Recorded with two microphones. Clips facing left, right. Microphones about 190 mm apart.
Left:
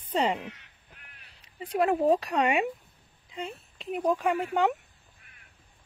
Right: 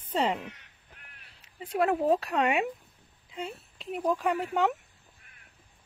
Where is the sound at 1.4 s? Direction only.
Centre (ahead or behind).